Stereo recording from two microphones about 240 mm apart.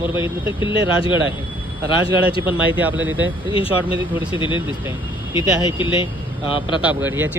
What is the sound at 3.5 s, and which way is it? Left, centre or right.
Speech, left.